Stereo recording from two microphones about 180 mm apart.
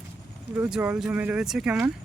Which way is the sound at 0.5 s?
10° right (ahead or behind).